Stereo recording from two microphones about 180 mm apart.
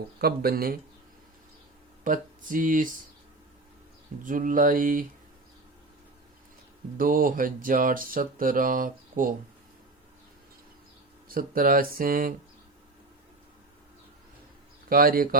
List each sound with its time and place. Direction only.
0.2 s speech: 55° right (ahead or behind)
2.0 s speech: 50° right (ahead or behind)
4.2 s speech: 45° right (ahead or behind)
6.9 s speech: 50° right (ahead or behind)
11.3 s speech: 55° right (ahead or behind)
14.8 s speech: 55° right (ahead or behind)